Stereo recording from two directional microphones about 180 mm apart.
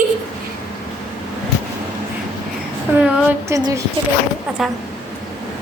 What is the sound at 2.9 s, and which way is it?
Speech, 5° right (ahead or behind).